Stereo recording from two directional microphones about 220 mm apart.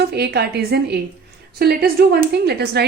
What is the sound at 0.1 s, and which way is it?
Speech, 45° right (ahead or behind).